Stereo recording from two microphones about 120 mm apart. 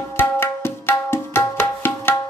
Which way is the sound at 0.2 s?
20° left (ahead or behind).